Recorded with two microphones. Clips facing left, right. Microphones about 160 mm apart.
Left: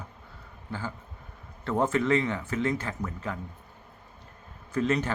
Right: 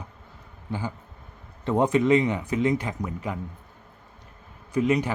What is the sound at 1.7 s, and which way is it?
Speech, 15° right (ahead or behind).